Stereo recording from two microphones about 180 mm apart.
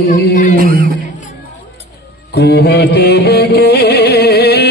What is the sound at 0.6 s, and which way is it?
Speech, 55° right (ahead or behind).